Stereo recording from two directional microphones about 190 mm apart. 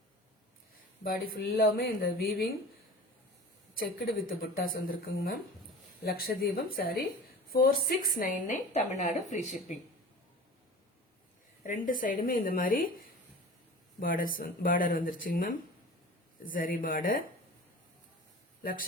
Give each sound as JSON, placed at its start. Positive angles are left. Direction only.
{"t": 1.0, "sound": "speech", "side_deg": 50}
{"t": 4.5, "sound": "a woman's voice", "side_deg": 50}
{"t": 11.6, "sound": "speech", "side_deg": 45}
{"t": 14.0, "sound": "speech", "side_deg": 45}
{"t": 18.6, "sound": "speech", "side_deg": 50}